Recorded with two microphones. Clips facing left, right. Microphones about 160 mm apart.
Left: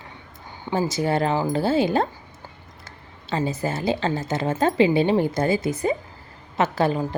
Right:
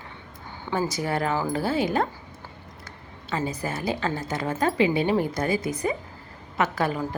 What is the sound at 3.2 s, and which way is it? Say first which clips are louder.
A woman's voice: left 4 dB; 30° left (ahead or behind).